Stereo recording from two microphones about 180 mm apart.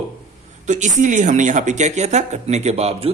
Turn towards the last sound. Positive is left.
turn(degrees=-35)  # may be behind; listen again after turning